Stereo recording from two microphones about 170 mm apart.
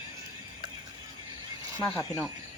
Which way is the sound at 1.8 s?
20° left (ahead or behind).